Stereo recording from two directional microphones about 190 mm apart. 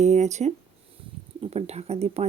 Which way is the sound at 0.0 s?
35° right (ahead or behind).